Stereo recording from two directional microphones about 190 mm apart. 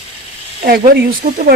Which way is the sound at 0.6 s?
50° right (ahead or behind).